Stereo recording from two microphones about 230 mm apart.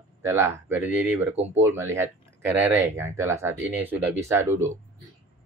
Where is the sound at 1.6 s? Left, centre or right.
Centre.